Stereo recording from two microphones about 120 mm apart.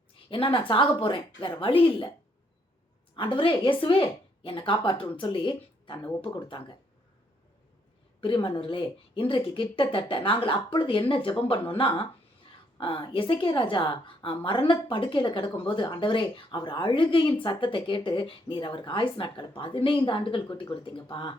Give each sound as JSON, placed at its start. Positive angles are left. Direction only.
{"t": 0.3, "sound": "a woman's voice", "side_deg": 45}
{"t": 3.2, "sound": "a woman's voice", "side_deg": 45}
{"t": 8.2, "sound": "a woman's voice", "side_deg": 45}